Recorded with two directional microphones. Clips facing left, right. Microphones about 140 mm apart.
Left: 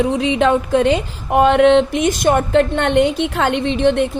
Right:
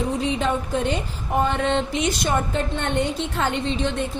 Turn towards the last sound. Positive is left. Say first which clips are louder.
# left 9 dB
turn(degrees=65)  # may be behind; listen again after turning